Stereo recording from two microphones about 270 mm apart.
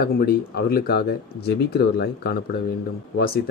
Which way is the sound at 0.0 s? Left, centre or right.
Left.